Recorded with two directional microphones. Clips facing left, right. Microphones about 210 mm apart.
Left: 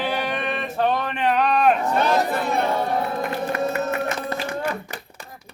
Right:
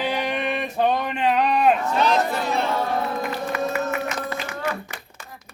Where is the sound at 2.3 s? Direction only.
55° left (ahead or behind).